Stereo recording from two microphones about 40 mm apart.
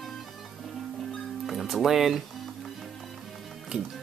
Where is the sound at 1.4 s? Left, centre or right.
Centre.